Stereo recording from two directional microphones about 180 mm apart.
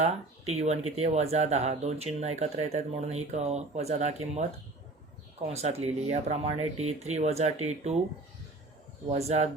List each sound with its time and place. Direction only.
0.0 s speech: 40° right (ahead or behind)
5.5 s speech: 35° right (ahead or behind)
9.0 s speech: 35° right (ahead or behind)